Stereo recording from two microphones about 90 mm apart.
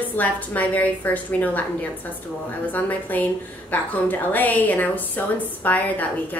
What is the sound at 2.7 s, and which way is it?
A woman's voice, 20° left (ahead or behind).